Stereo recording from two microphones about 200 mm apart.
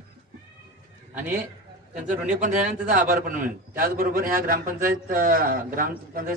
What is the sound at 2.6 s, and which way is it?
A man's voice, 45° right (ahead or behind).